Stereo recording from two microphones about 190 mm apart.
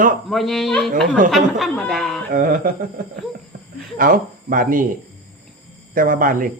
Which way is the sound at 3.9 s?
50° right (ahead or behind).